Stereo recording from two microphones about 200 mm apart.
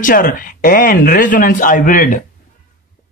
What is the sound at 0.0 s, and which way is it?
Speech, 45° left (ahead or behind).